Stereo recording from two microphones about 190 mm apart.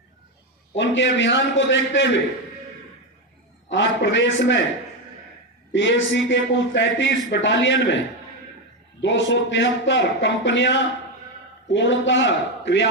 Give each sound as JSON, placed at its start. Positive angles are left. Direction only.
{"t": 0.8, "sound": "a man's voice", "side_deg": 70}
{"t": 3.7, "sound": "a man's voice", "side_deg": 75}
{"t": 5.7, "sound": "a man's voice", "side_deg": 75}